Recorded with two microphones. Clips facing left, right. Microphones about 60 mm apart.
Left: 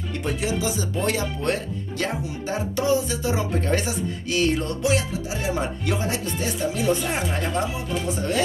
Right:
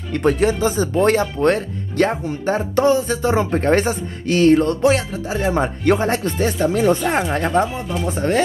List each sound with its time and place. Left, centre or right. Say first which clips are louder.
0.1 s speech: right 10 dB; right